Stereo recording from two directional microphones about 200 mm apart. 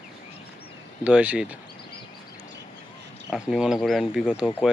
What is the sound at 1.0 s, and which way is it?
Speech, 5° right (ahead or behind).